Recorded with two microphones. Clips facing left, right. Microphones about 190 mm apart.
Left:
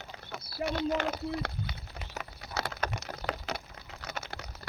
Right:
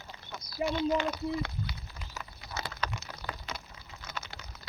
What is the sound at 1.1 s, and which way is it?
Speech, 50° left (ahead or behind).